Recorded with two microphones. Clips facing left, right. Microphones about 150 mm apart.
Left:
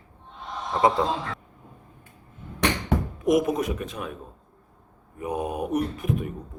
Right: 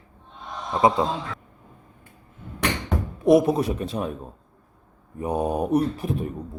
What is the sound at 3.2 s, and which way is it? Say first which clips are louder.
Speech: right 5 dB; 30° right (ahead or behind).